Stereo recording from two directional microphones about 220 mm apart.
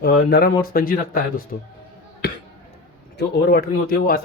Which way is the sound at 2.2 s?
50° left (ahead or behind).